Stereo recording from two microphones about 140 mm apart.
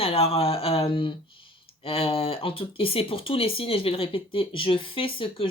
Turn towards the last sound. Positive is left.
turn(degrees=40)  # may be behind; listen again after turning